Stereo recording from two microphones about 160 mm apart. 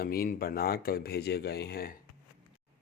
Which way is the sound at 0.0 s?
70° left (ahead or behind).